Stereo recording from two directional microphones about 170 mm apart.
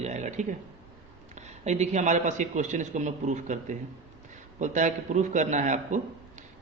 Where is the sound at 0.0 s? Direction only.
45° right (ahead or behind).